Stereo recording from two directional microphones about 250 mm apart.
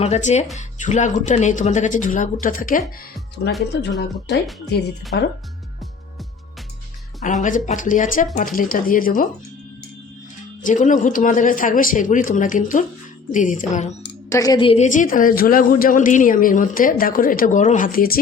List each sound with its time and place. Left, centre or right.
0.0 s speech: left
7.2 s a woman's voice: left
10.6 s a woman's voice: left
14.3 s a woman's voice: centre; by 18.2 s left